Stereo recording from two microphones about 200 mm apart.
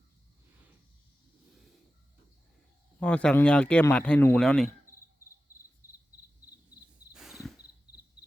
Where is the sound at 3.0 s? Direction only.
5° left (ahead or behind).